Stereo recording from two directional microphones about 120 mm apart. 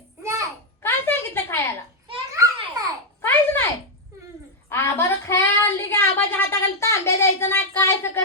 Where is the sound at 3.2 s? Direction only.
20° left (ahead or behind).